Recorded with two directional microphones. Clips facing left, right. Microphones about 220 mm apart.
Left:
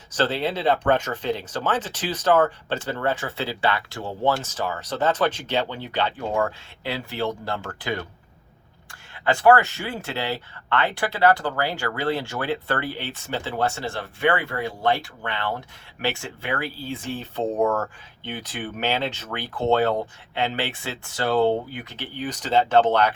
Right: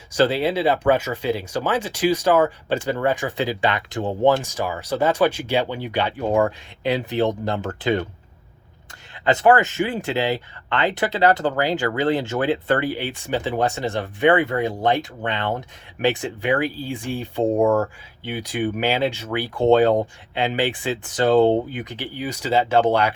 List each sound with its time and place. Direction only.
0.1 s speech: 10° right (ahead or behind)
9.2 s speech: 20° right (ahead or behind)